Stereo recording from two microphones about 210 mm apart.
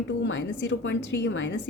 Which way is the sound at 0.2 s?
60° left (ahead or behind).